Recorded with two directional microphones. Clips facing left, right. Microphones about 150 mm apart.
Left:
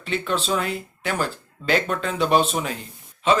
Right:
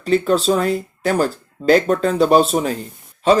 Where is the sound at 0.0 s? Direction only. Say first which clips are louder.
Right 10 dB; 40° right (ahead or behind).